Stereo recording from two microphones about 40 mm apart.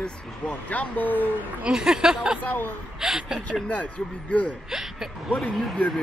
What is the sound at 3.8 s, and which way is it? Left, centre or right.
Speech, left.